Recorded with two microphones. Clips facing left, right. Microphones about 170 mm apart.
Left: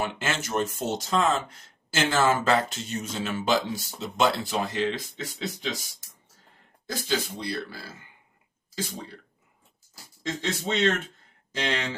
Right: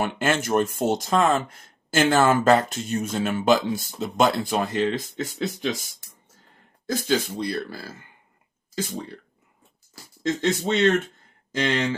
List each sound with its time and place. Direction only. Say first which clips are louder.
0.0 s speech: right 6 dB; 55° right (ahead or behind)
7.3 s speech: right 5 dB; 45° right (ahead or behind)
10.2 s speech: right 7 dB; 50° right (ahead or behind)